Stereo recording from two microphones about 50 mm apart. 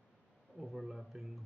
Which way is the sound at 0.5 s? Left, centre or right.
Centre.